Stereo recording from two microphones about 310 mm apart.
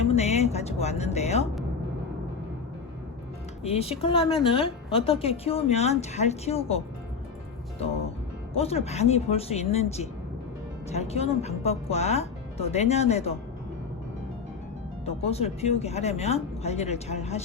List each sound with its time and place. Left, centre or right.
0.1 s music: left
3.6 s a woman's voice: centre
8.5 s a woman's voice: centre
15.0 s a woman's voice: centre